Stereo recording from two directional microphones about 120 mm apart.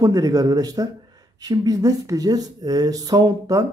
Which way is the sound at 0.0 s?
30° right (ahead or behind).